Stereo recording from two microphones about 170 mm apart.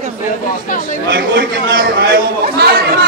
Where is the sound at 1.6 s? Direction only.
60° right (ahead or behind).